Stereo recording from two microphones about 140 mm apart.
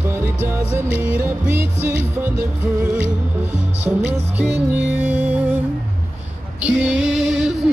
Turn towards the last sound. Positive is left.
turn(degrees=-5)  # may be behind; listen again after turning